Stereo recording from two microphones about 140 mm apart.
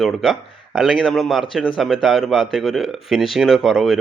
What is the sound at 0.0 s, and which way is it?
Speech, centre (ahead or behind).